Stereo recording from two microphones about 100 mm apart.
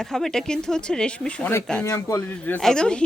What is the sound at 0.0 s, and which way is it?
Speech, 5° left (ahead or behind).